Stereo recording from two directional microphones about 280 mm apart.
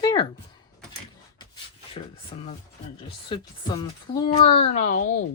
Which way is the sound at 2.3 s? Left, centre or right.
Centre.